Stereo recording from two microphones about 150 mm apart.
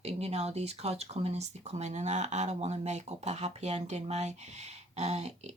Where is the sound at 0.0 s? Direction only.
45° right (ahead or behind).